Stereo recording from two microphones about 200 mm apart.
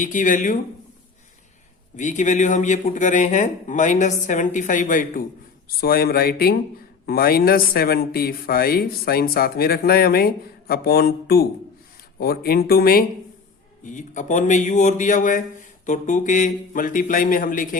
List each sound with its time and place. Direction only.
0.0 s a man's voice: 40° left (ahead or behind)
2.0 s a man's voice: 35° left (ahead or behind)
13.8 s a man's voice: 40° left (ahead or behind)